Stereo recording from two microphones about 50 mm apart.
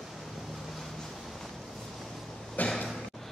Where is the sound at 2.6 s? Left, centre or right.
Left.